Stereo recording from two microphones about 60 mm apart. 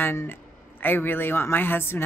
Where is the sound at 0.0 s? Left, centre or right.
Left.